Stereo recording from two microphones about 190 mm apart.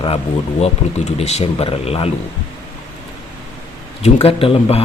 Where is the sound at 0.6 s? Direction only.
35° left (ahead or behind).